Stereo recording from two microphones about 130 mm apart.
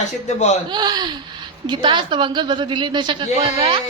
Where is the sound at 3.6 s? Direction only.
45° right (ahead or behind).